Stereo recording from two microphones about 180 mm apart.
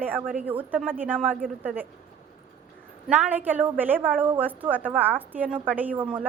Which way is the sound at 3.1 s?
10° right (ahead or behind).